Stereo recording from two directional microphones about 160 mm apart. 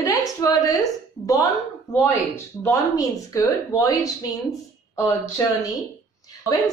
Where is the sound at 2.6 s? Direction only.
20° left (ahead or behind).